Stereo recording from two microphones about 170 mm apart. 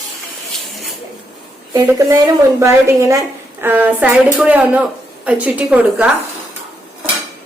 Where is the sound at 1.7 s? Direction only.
20° right (ahead or behind).